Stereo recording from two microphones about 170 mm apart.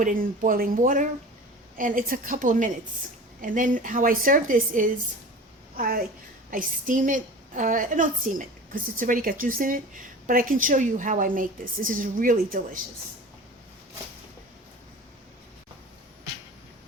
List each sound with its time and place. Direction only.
0.0 s a woman's voice: 55° right (ahead or behind)